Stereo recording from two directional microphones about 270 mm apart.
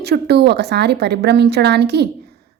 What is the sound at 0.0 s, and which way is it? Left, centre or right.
A woman's voice, right.